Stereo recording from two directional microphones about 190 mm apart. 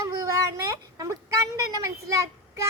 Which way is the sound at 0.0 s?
15° right (ahead or behind).